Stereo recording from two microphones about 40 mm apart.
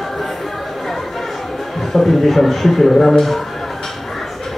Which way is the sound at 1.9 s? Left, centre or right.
Centre.